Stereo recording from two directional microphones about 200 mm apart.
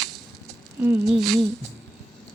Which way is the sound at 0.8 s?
5° right (ahead or behind).